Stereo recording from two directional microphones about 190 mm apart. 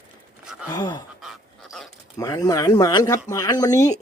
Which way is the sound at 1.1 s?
Centre (ahead or behind).